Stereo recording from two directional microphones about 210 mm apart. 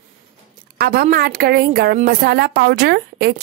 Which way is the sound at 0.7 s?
50° right (ahead or behind).